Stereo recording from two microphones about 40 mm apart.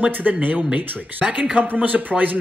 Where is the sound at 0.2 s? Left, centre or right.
Right.